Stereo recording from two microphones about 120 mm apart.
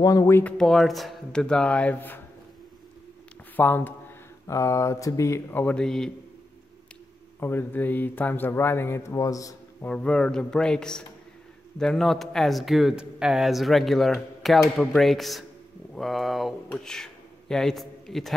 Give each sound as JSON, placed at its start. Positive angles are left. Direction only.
{"t": 0.0, "sound": "speech", "side_deg": 30}
{"t": 0.4, "sound": "speech", "side_deg": 10}
{"t": 3.5, "sound": "speech", "side_deg": 15}
{"t": 7.3, "sound": "speech", "side_deg": 20}
{"t": 9.8, "sound": "a man's voice", "side_deg": 5}